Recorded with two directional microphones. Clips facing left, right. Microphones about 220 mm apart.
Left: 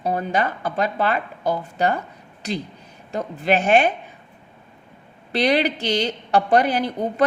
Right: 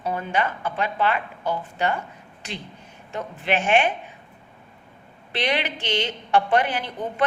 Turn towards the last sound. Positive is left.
turn(degrees=40)  # may be behind; listen again after turning